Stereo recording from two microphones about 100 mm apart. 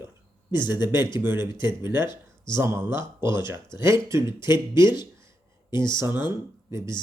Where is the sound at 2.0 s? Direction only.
50° left (ahead or behind).